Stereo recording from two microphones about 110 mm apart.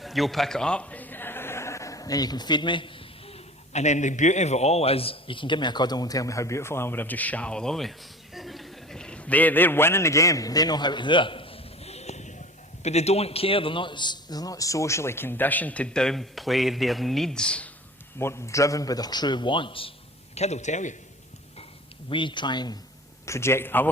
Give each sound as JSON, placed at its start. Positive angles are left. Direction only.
{"t": 0.0, "sound": "a man's voice", "side_deg": 0}
{"t": 18.2, "sound": "a man's voice", "side_deg": 25}
{"t": 20.3, "sound": "a man's voice", "side_deg": 85}
{"t": 22.1, "sound": "speech", "side_deg": 45}
{"t": 23.2, "sound": "a man's voice", "side_deg": 25}